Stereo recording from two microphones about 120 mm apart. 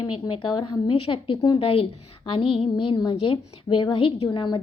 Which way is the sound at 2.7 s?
40° left (ahead or behind).